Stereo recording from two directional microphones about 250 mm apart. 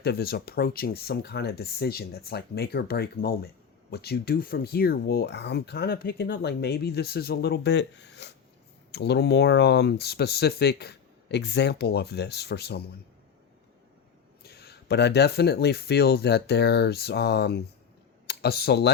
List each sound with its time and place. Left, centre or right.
0.0 s speech: left
14.4 s speech: left